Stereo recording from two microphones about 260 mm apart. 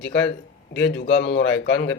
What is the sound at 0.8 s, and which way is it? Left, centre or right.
Speech, left.